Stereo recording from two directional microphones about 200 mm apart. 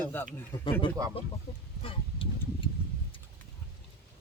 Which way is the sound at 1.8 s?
25° left (ahead or behind).